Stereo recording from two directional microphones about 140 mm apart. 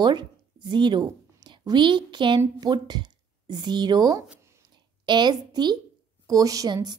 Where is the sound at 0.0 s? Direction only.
30° right (ahead or behind).